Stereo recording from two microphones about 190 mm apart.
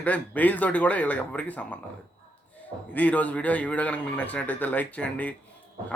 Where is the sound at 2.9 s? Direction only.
5° left (ahead or behind).